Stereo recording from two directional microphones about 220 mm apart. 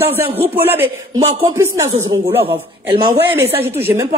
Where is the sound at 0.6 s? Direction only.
10° right (ahead or behind).